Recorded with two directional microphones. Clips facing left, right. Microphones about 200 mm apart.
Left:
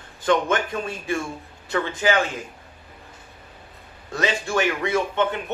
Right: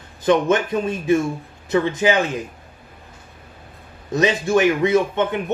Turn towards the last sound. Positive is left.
turn(degrees=-20)  # may be behind; listen again after turning